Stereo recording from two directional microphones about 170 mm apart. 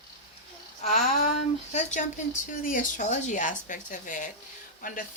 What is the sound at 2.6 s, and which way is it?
A woman's voice, 50° left (ahead or behind).